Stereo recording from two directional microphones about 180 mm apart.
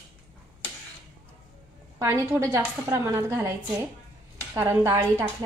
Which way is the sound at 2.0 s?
15° right (ahead or behind).